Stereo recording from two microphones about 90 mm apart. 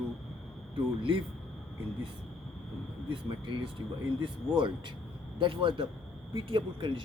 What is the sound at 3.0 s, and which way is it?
Speech, 70° right (ahead or behind).